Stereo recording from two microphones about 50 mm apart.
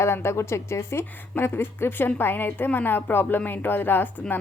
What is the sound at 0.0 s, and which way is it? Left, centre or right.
A woman's voice, left.